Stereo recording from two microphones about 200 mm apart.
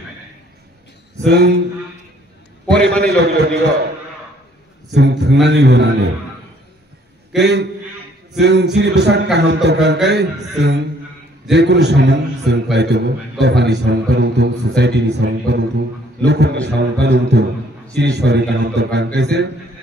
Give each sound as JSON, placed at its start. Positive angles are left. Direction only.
{"t": 1.2, "sound": "a man's voice", "side_deg": -55}
{"t": 3.0, "sound": "a man's voice", "side_deg": -55}
{"t": 4.9, "sound": "a man's voice", "side_deg": -55}
{"t": 7.3, "sound": "a man's voice", "side_deg": -60}